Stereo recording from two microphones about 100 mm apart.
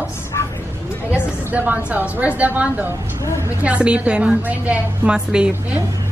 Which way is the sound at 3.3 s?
30° left (ahead or behind).